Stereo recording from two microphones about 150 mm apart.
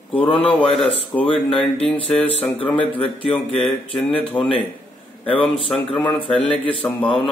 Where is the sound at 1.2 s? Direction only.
35° left (ahead or behind).